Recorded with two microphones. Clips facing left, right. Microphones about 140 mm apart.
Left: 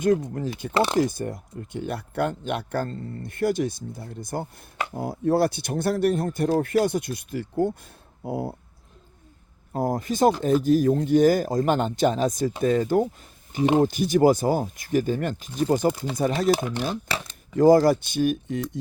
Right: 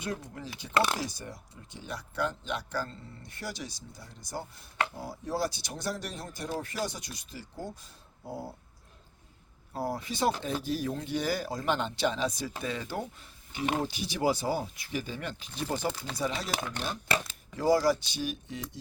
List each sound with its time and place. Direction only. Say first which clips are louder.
0.0 s speech: left 15 dB; 50° left (ahead or behind)
9.7 s speech: left 9 dB; 50° left (ahead or behind)
16.5 s speech: left 13 dB; 25° left (ahead or behind)
17.6 s speech: left 9 dB; 50° left (ahead or behind)